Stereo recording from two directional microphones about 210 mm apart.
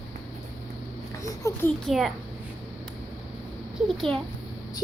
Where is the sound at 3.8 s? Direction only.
Centre (ahead or behind).